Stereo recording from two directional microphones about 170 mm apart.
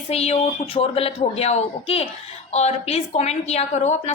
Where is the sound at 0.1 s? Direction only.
35° left (ahead or behind).